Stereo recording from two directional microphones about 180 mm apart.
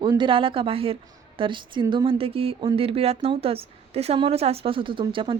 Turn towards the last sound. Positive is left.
turn(degrees=-30)  # may be behind; listen again after turning